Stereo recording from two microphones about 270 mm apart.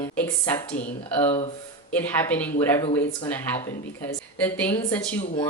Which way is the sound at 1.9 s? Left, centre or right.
Centre.